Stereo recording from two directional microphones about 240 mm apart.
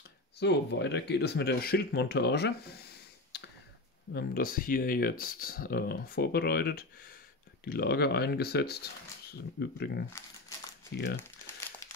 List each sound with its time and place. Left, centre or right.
0.4 s speech: left
3.3 s a sound: left
4.1 s speech: left
11.1 s crumpling: centre